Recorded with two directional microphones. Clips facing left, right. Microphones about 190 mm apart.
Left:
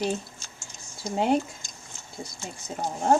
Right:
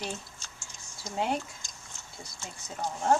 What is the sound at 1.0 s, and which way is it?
Speech, 25° left (ahead or behind).